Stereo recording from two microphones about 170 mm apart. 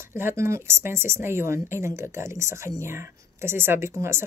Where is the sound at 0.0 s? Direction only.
15° right (ahead or behind).